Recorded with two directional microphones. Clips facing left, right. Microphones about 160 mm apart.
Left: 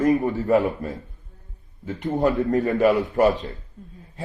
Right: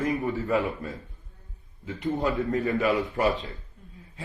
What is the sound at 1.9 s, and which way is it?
A man's voice, 45° left (ahead or behind).